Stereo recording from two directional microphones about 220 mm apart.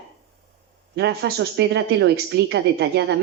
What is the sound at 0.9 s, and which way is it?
A woman's voice, 50° right (ahead or behind).